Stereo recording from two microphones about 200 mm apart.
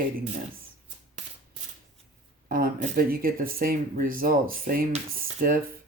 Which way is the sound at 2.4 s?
45° right (ahead or behind).